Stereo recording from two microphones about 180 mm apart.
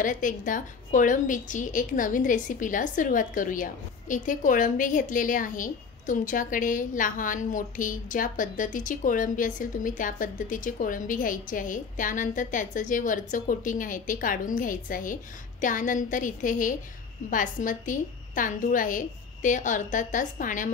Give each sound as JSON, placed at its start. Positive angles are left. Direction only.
{"t": 0.0, "sound": "a woman's voice", "side_deg": 45}